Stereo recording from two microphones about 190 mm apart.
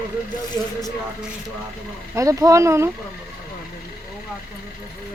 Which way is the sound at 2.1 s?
15° right (ahead or behind).